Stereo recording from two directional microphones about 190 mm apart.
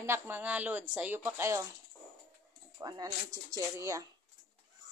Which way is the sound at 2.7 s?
20° right (ahead or behind).